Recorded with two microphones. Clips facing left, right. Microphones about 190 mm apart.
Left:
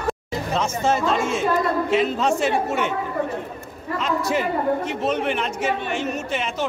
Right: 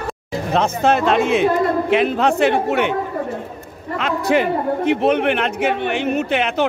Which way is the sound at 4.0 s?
65° right (ahead or behind).